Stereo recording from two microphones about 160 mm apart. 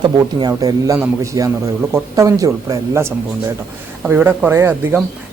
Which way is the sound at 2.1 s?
20° right (ahead or behind).